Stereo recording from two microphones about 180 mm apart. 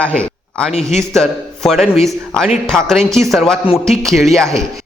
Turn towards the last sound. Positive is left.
turn(degrees=0)  # may be behind; listen again after turning